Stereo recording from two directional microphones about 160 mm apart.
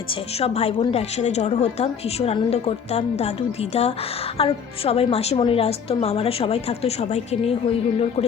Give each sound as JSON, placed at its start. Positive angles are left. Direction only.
{"t": 0.1, "sound": "a woman's voice", "side_deg": 40}